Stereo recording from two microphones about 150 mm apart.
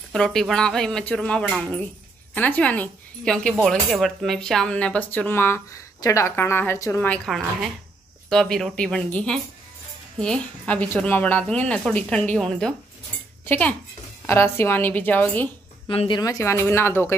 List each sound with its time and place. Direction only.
0.1 s speech: 5° left (ahead or behind)
7.2 s speech: centre (ahead or behind)
15.9 s a woman's voice: 40° left (ahead or behind)
16.2 s speech: 20° left (ahead or behind)